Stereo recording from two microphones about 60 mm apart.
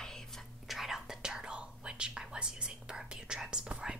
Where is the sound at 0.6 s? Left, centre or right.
Centre.